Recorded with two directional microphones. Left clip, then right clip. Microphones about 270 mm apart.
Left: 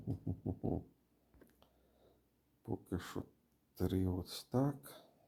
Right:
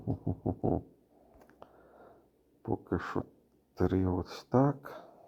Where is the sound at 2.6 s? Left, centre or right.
Centre.